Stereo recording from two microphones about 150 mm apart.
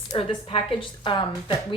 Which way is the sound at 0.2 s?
35° left (ahead or behind).